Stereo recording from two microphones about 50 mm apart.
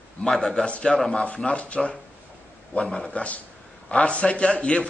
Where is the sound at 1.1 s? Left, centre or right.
Left.